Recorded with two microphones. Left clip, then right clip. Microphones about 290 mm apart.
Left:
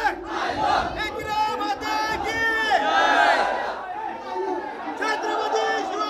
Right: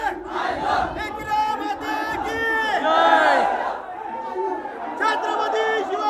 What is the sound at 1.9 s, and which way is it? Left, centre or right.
Battle cry, centre.